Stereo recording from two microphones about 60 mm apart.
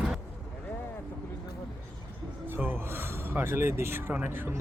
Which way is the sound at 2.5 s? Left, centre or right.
Right.